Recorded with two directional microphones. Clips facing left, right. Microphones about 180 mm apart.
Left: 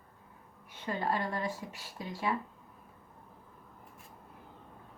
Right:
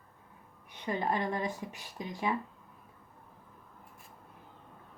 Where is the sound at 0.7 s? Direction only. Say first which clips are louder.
Right 1 dB; 15° right (ahead or behind).